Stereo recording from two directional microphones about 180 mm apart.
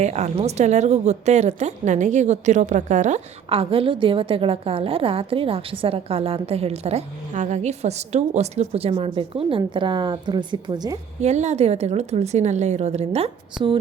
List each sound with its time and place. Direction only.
0.0 s a woman's voice: 40° right (ahead or behind)
11.2 s a woman's voice: 40° right (ahead or behind)